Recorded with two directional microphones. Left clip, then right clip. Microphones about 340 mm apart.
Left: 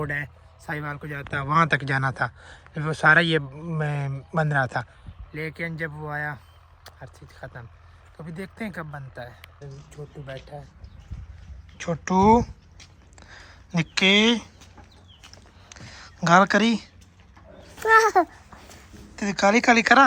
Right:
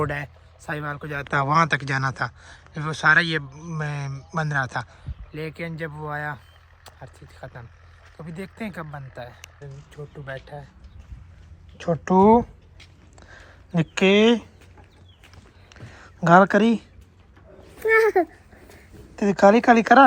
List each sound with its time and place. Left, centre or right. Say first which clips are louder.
0.0 s speech: right 2 dB; centre
1.1 s speech: right 8 dB; centre
1.5 s speech: left 1 dB; centre
11.8 s speech: right 3 dB; centre
13.1 s a sound: left 1 dB; centre
15.7 s a sound: left 2 dB; centre
17.7 s a child's voice: left 1 dB; centre
19.1 s speech: right 5 dB; centre